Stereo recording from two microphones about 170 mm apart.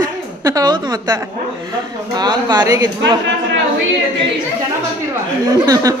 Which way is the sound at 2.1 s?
25° right (ahead or behind).